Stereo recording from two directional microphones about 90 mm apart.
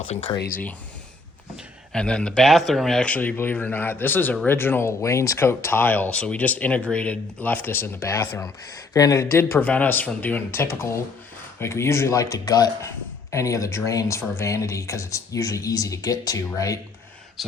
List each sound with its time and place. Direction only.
0.3 s speech: 50° left (ahead or behind)
1.9 s a man's voice: 10° left (ahead or behind); by 9.5 s 35° left (ahead or behind)
9.5 s a man's voice: 15° left (ahead or behind); by 12.7 s 45° left (ahead or behind)
13.3 s speech: 35° left (ahead or behind)